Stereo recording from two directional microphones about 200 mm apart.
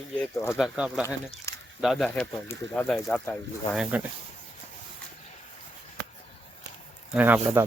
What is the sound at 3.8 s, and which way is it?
Speech, 5° right (ahead or behind).